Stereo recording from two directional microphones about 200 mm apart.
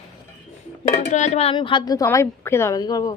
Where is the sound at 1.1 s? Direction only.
35° left (ahead or behind).